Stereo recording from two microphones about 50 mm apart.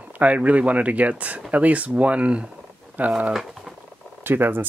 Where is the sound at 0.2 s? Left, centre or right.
Right.